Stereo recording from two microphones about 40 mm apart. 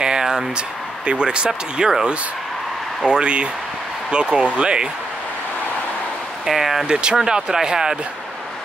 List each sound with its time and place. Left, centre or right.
0.0 s a sound: centre
0.6 s speech: right
1.5 s speech: centre
3.1 s speech: right
6.4 s speech: centre
6.9 s speech: right